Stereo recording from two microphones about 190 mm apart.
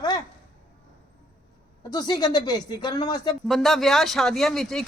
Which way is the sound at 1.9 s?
20° left (ahead or behind).